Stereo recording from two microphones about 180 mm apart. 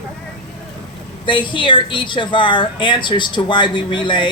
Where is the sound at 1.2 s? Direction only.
25° left (ahead or behind).